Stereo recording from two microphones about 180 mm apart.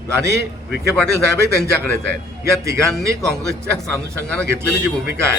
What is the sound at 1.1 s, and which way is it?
A man's voice, 15° right (ahead or behind).